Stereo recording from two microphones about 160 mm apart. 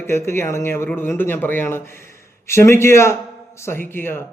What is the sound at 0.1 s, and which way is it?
Speech, 15° left (ahead or behind).